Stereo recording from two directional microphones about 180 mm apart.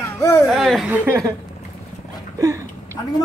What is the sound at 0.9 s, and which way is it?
Speech, 10° right (ahead or behind).